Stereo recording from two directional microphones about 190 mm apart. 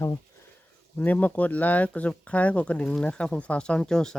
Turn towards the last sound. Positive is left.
turn(degrees=5)  # may be behind; listen again after turning